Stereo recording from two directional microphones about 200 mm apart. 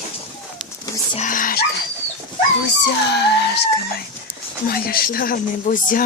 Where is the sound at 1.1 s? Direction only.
40° left (ahead or behind).